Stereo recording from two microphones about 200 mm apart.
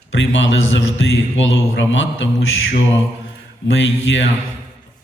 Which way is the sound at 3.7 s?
70° left (ahead or behind).